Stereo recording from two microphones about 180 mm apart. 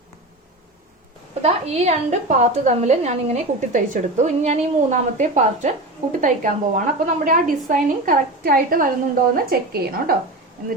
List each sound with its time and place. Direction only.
1.4 s a woman's voice: 35° right (ahead or behind); by 10.2 s 60° right (ahead or behind)